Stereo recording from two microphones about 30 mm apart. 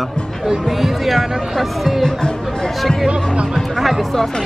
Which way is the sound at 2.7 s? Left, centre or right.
Centre.